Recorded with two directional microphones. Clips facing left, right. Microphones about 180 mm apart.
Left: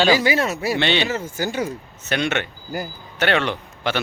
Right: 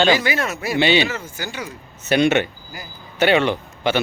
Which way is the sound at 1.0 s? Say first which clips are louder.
Left 3 dB; 40° left (ahead or behind).